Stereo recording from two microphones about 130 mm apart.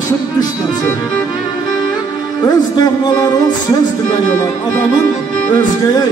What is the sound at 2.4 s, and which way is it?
Music, 30° left (ahead or behind).